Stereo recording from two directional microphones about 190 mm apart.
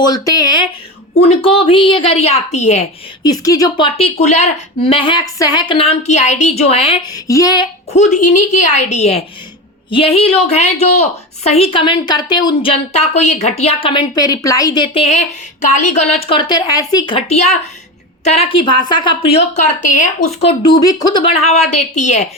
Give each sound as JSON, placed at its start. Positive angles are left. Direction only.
{"t": 0.0, "sound": "a woman's voice", "side_deg": 20}
{"t": 3.2, "sound": "a woman's voice", "side_deg": 20}
{"t": 7.3, "sound": "a woman's voice", "side_deg": 20}
{"t": 7.9, "sound": "a woman's voice", "side_deg": 40}
{"t": 18.6, "sound": "a woman's voice", "side_deg": 25}
{"t": 20.4, "sound": "a woman's voice", "side_deg": 25}